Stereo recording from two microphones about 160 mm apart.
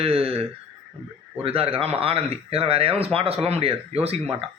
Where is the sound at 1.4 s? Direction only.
35° right (ahead or behind).